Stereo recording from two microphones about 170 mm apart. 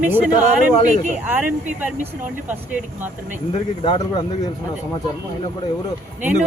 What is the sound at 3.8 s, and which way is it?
Speech, 30° left (ahead or behind).